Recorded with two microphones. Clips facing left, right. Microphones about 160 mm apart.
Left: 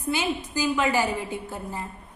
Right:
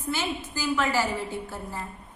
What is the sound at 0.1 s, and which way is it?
A woman's voice, 15° left (ahead or behind).